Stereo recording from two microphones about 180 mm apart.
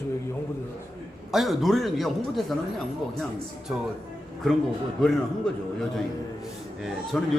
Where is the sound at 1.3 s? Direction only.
Centre (ahead or behind).